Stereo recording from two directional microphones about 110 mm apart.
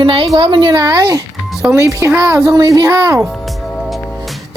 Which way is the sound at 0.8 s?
30° right (ahead or behind).